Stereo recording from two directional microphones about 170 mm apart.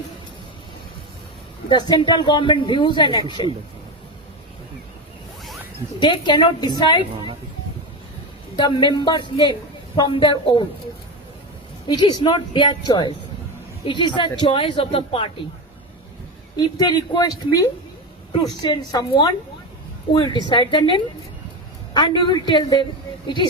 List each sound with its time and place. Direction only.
1.7 s a man's voice: 25° left (ahead or behind)
6.0 s a man's voice: 25° left (ahead or behind)
8.5 s a man's voice: 25° left (ahead or behind)
11.9 s a man's voice: 25° left (ahead or behind)
16.6 s a man's voice: 20° left (ahead or behind)